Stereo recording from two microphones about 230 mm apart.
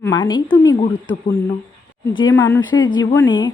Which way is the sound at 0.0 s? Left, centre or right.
Centre.